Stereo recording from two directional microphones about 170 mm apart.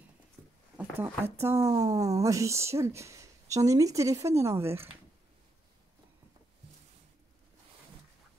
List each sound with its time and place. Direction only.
0.7 s speech: 15° right (ahead or behind)